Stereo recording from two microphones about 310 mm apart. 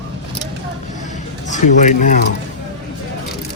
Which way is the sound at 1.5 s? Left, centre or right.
Left.